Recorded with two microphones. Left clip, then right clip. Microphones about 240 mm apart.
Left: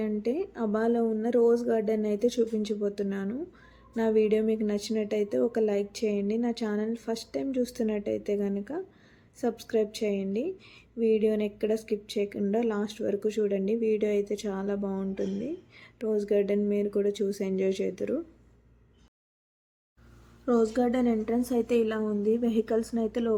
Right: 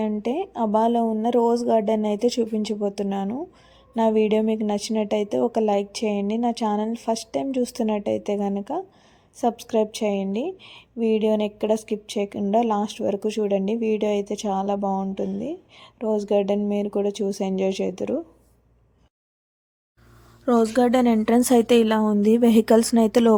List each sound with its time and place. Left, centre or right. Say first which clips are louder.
0.0 s speech: right 4 dB; right
20.4 s a woman's voice: right 6 dB; right